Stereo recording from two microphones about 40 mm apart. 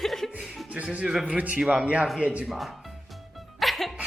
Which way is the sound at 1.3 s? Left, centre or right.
Right.